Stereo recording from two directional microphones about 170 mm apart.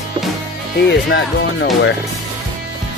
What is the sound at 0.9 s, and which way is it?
Speech, 90° left.